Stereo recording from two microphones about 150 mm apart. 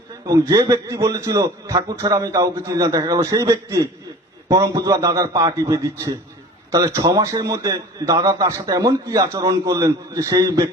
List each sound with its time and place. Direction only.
0.3 s a man's voice: 25° right (ahead or behind)